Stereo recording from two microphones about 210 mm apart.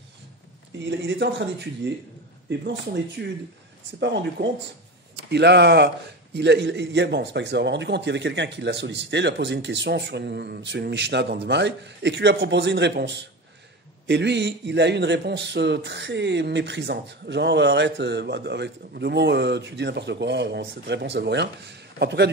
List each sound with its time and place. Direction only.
0.7 s a man's voice: 60° right (ahead or behind)